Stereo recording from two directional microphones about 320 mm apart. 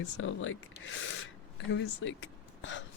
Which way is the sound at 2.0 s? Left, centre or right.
Left.